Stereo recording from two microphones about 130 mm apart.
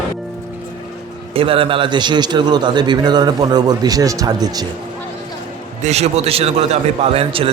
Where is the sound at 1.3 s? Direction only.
45° right (ahead or behind); by 4.6 s 30° right (ahead or behind).